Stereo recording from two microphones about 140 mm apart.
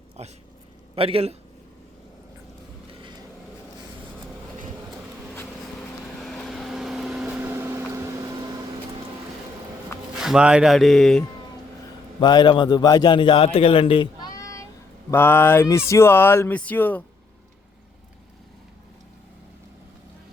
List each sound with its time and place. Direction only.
0.2 s a man's voice: 50° right (ahead or behind)
3.0 s a sound: 30° right (ahead or behind)
6.1 s vehicle: 5° left (ahead or behind)
7.5 s vehicle: 15° right (ahead or behind)
10.2 s speech: 5° right (ahead or behind)
12.2 s a man's voice: 30° left (ahead or behind)
14.3 s a sound: 25° left (ahead or behind)
15.1 s speech: 15° left (ahead or behind)